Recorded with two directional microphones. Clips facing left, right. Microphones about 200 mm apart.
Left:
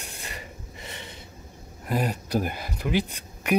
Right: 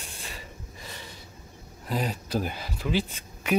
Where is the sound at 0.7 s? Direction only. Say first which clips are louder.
Left 3 dB; 20° left (ahead or behind).